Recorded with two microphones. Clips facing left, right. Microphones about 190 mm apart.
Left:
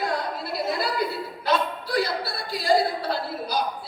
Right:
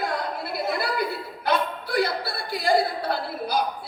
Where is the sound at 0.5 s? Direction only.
55° right (ahead or behind).